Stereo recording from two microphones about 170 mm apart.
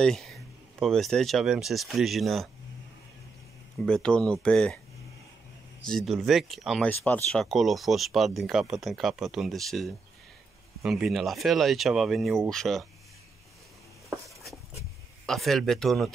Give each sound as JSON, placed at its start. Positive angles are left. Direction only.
{"t": 0.0, "sound": "speech", "side_deg": 0}
{"t": 3.8, "sound": "speech", "side_deg": 5}
{"t": 5.9, "sound": "speech", "side_deg": 0}
{"t": 6.9, "sound": "speech", "side_deg": 10}
{"t": 15.2, "sound": "speech", "side_deg": 0}